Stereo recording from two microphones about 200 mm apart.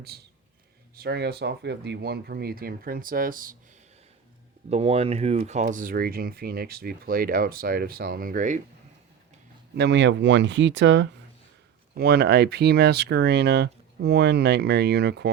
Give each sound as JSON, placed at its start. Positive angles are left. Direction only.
{"t": 0.9, "sound": "speech", "side_deg": -55}
{"t": 4.7, "sound": "speech", "side_deg": -30}
{"t": 9.7, "sound": "speech", "side_deg": -60}
{"t": 11.9, "sound": "speech", "side_deg": -55}